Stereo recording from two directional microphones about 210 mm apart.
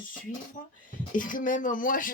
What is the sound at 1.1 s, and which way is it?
Speech, 40° left (ahead or behind).